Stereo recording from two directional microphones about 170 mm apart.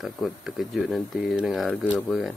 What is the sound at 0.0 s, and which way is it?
Speech, centre (ahead or behind).